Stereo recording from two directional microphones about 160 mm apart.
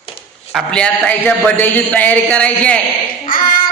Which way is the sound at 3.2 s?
65° left (ahead or behind).